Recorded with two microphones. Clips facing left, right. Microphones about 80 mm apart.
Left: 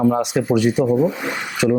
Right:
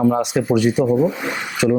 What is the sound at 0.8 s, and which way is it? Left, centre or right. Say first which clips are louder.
Speech: even; right.